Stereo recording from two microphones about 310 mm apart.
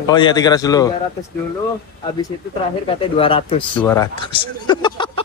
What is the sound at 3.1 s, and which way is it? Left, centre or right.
Speech, centre.